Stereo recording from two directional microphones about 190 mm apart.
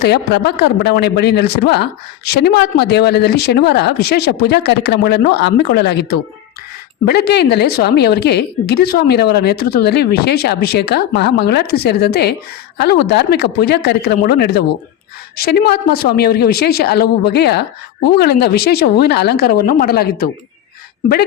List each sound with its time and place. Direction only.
0.0 s a man's voice: 60° left (ahead or behind)